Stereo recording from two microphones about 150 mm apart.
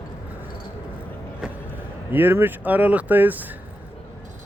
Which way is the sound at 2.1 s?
15° right (ahead or behind).